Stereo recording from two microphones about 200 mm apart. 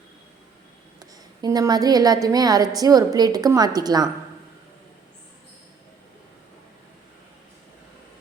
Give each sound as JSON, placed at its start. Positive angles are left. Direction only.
{"t": 1.4, "sound": "a woman's voice", "side_deg": -20}